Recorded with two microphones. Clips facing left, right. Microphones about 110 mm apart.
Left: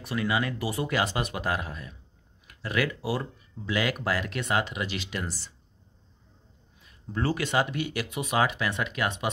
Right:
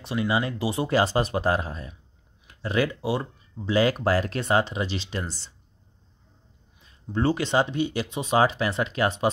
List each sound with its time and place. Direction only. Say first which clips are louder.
0.0 s speech: right 3 dB; 25° right (ahead or behind)
6.9 s speech: right 5 dB; 25° right (ahead or behind)